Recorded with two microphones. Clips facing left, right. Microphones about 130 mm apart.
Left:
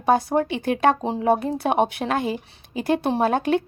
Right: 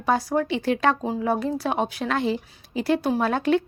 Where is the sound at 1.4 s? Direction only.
55° left (ahead or behind).